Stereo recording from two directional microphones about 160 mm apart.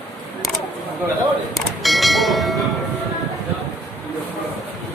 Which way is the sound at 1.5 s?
Centre (ahead or behind).